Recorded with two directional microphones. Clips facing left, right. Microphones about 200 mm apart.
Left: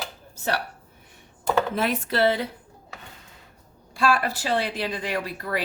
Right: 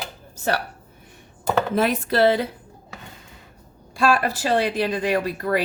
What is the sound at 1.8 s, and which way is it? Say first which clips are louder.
Speech: right 4 dB; 40° right (ahead or behind).